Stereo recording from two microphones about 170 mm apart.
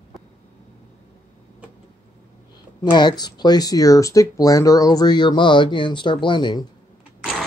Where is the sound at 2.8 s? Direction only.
25° left (ahead or behind).